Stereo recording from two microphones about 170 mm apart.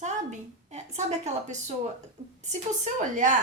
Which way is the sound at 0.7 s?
40° right (ahead or behind).